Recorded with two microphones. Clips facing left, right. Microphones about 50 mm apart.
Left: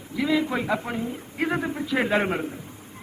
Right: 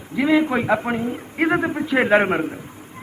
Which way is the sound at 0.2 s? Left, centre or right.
Right.